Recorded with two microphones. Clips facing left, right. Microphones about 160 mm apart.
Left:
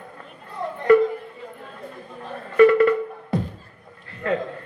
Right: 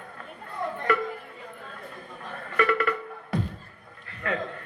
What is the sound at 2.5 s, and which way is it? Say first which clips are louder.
Music: left 11 dB; 25° left (ahead or behind).